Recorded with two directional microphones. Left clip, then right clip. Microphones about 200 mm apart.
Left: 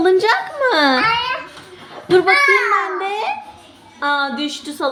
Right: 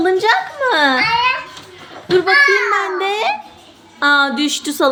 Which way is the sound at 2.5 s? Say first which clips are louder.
Even; 20° right (ahead or behind).